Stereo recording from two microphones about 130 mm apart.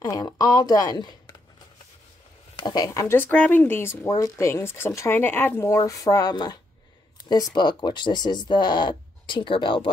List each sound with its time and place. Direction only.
0.0 s speech: 30° left (ahead or behind)
2.5 s speech: 30° left (ahead or behind)
3.2 s speech: 10° left (ahead or behind); by 9.8 s 40° left (ahead or behind)